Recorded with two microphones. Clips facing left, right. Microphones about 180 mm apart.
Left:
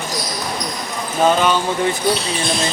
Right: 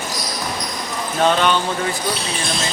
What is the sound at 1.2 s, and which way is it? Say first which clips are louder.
Speech: left 2 dB; 5° left (ahead or behind).